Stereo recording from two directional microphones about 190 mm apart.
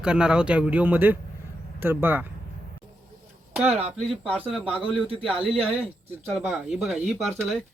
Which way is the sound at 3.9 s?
Centre (ahead or behind).